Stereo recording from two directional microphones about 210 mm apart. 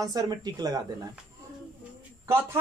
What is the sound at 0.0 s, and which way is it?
Speech, 15° right (ahead or behind).